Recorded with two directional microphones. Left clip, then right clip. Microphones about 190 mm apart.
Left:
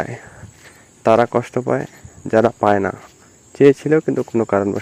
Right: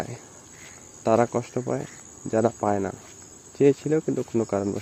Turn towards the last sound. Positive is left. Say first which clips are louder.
# left 8 dB
turn(degrees=15)  # may be behind; listen again after turning